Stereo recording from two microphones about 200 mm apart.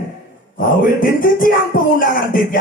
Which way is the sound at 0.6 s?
45° left (ahead or behind).